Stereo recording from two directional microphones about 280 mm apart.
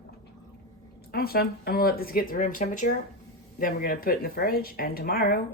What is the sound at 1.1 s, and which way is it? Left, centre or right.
Speech, left.